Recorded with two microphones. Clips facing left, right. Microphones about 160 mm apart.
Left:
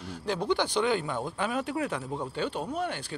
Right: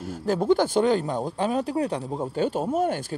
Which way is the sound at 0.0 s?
45° right (ahead or behind).